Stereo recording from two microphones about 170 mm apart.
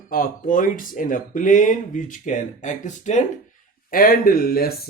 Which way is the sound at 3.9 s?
60° left (ahead or behind).